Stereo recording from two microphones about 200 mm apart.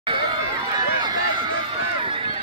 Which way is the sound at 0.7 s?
20° right (ahead or behind).